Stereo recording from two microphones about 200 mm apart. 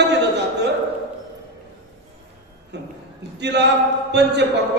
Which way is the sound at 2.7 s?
60° right (ahead or behind).